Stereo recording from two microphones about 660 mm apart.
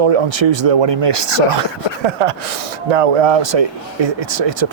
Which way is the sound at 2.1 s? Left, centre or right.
Right.